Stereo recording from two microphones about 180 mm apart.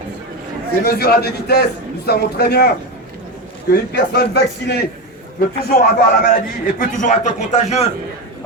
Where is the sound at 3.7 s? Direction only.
65° left (ahead or behind); by 7.9 s 35° left (ahead or behind).